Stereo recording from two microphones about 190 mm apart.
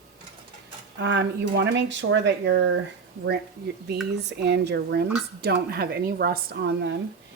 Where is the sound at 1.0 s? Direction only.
70° right (ahead or behind).